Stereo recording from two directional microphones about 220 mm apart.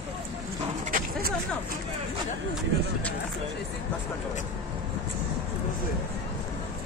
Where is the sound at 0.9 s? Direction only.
40° right (ahead or behind).